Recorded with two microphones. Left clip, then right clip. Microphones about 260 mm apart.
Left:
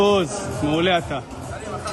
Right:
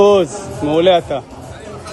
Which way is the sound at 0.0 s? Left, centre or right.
Centre.